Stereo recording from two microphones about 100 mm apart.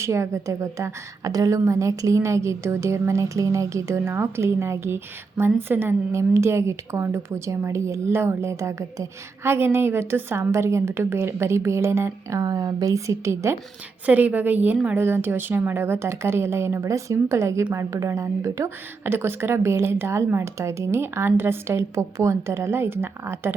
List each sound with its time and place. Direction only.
0.0 s a woman's voice: 30° right (ahead or behind)
14.1 s a woman's voice: 15° right (ahead or behind)